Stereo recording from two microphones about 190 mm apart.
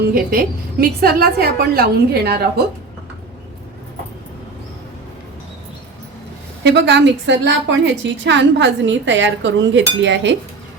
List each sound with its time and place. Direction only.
0.0 s a woman's voice: 50° right (ahead or behind)
6.6 s a woman's voice: 65° right (ahead or behind)